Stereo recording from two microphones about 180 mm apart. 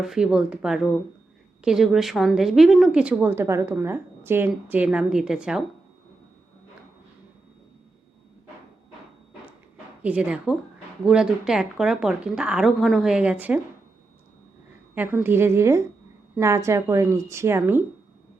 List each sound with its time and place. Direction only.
0.0 s a woman's voice: 5° right (ahead or behind)
10.0 s a woman's voice: 10° right (ahead or behind)
14.9 s speech: 10° right (ahead or behind)